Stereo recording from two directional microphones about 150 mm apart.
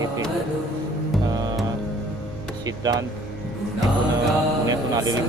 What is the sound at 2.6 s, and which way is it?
Speech, 25° right (ahead or behind).